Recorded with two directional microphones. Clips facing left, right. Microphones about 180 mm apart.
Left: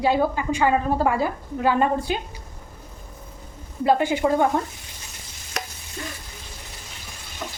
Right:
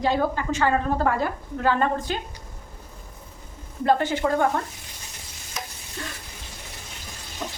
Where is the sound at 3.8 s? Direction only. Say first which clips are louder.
Left 2 dB; 10° left (ahead or behind).